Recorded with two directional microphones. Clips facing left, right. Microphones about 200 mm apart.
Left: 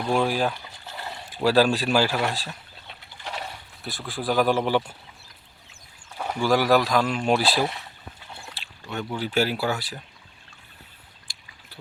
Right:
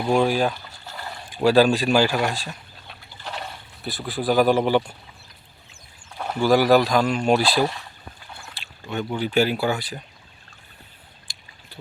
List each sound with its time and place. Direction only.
0.0 s speech: centre (ahead or behind)
0.5 s water: 15° left (ahead or behind)
1.5 s speech: centre (ahead or behind)
6.1 s a sound: 10° left (ahead or behind)
6.4 s speech: centre (ahead or behind)
8.9 s speech: centre (ahead or behind)